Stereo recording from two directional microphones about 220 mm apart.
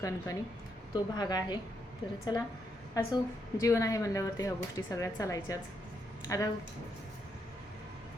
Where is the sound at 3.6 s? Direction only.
15° left (ahead or behind).